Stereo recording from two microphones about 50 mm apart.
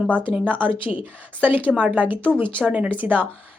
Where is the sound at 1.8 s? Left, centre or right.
Right.